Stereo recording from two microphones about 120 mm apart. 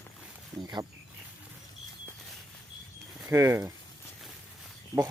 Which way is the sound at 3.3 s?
25° right (ahead or behind).